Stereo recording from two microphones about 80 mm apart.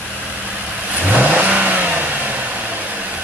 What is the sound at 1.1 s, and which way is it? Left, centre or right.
Vehicle, centre.